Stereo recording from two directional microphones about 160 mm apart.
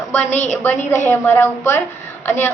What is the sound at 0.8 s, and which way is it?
A woman's voice, 15° left (ahead or behind).